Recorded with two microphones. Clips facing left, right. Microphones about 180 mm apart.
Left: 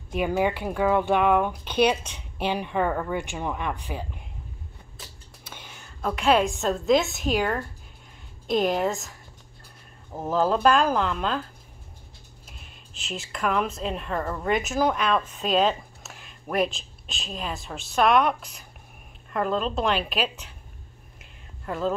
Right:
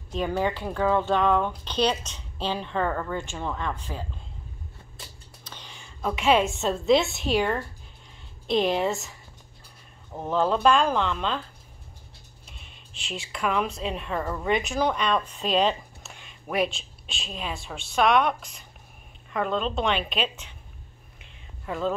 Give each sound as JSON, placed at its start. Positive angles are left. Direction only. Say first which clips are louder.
{"t": 0.1, "sound": "speech", "louder": "left 2 dB", "side_deg": 10}
{"t": 5.4, "sound": "a woman's voice", "louder": "left 1 dB", "side_deg": 10}
{"t": 10.1, "sound": "speech", "louder": "left 1 dB", "side_deg": 5}
{"t": 12.4, "sound": "speech", "louder": "left 1 dB", "side_deg": 5}
{"t": 21.2, "sound": "whispering", "louder": "even", "side_deg": 0}